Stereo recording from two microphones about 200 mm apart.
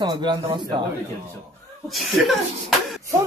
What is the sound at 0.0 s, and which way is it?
Speech, 20° right (ahead or behind).